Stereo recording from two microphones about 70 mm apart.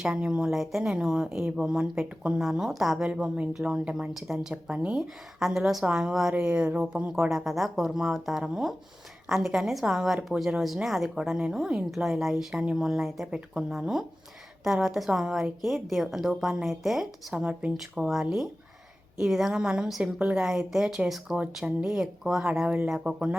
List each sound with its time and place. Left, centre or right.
0.0 s speech: centre
2.4 s a woman's voice: centre
5.4 s a woman's voice: centre
17.4 s speech: centre
17.7 s a woman's voice: centre
20.4 s speech: centre
22.6 s speech: right
22.9 s speech: centre